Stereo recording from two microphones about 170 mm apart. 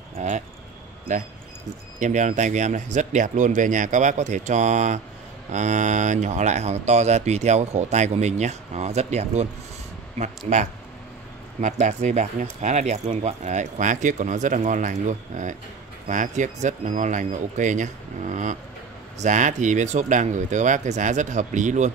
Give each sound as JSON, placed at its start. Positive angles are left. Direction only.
{"t": 0.1, "sound": "speech", "side_deg": -45}
{"t": 2.0, "sound": "speech", "side_deg": -45}
{"t": 11.6, "sound": "speech", "side_deg": -40}